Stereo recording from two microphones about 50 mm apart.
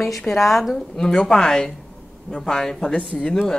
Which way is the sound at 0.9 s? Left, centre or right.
Centre.